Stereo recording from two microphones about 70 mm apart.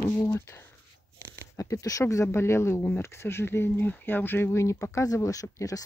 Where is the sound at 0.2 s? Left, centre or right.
Left.